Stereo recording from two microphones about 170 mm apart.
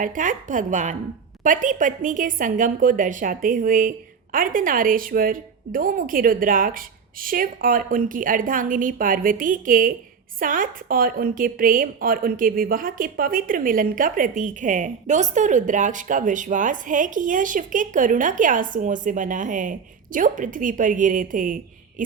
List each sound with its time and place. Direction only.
0.0 s a woman's voice: 50° right (ahead or behind)